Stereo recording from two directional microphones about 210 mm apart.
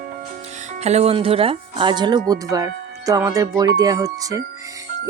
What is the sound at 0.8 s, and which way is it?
Speech, 30° right (ahead or behind).